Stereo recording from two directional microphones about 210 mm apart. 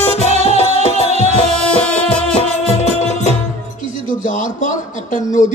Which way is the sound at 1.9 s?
5° left (ahead or behind).